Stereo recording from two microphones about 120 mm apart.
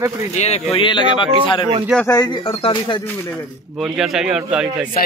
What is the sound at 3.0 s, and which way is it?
Speech, 20° left (ahead or behind).